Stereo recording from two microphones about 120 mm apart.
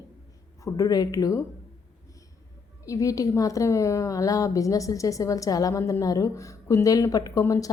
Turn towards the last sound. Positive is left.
turn(degrees=30)  # may be behind; listen again after turning